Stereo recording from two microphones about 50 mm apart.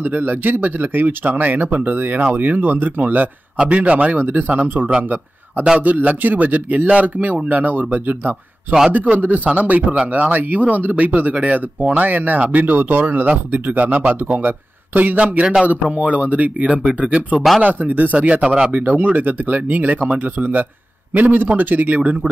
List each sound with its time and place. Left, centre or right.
0.0 s a man's voice: right
18.1 s a man's voice: right
18.7 s speech: right